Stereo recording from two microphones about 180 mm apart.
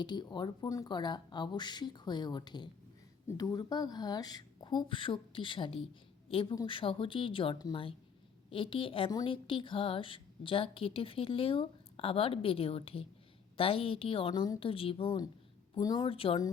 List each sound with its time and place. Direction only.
0.0 s a woman's voice: 25° left (ahead or behind)